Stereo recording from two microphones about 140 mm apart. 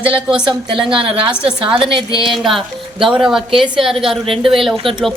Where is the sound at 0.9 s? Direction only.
40° right (ahead or behind).